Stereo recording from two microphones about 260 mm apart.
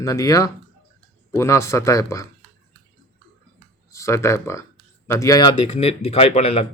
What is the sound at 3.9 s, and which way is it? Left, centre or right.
Speech, centre.